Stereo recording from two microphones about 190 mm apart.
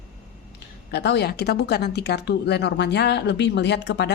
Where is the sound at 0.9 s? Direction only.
60° left (ahead or behind).